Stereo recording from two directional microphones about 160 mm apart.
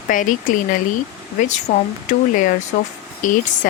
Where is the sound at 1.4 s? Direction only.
50° left (ahead or behind).